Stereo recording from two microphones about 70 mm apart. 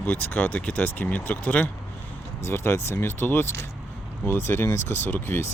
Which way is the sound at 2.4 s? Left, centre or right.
Left.